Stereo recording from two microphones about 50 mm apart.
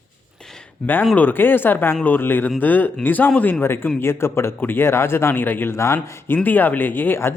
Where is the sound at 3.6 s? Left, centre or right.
Left.